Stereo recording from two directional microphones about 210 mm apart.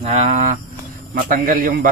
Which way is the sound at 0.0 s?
30° right (ahead or behind).